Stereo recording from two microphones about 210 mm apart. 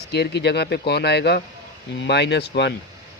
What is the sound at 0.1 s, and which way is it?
A man's voice, 55° left (ahead or behind).